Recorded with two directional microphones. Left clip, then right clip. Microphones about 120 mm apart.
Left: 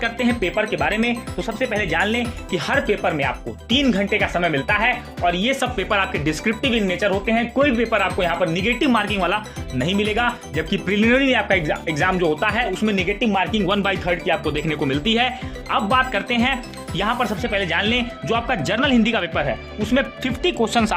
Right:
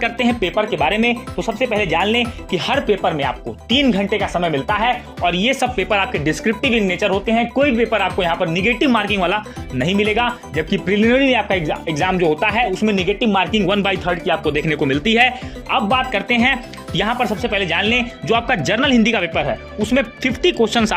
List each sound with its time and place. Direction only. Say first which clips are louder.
0.0 s speech: right 3 dB; 35° right (ahead or behind)
0.6 s speech: right 4 dB; 55° right (ahead or behind)
0.9 s speech: right 4 dB; 35° right (ahead or behind)
1.4 s speech: right 3 dB; 20° right (ahead or behind)
3.7 s speech: right 3 dB; 15° right (ahead or behind)
4.1 s speech: right 1 dB; 35° right (ahead or behind)
10.8 s speech: right 3 dB; 10° right (ahead or behind)
11.4 s speech: even; 25° right (ahead or behind)
13.1 s speech: right 3 dB; 40° right (ahead or behind)
13.6 s speech: right 3 dB; 25° right (ahead or behind)